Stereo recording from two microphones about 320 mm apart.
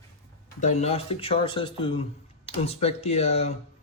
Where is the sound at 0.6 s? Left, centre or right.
Left.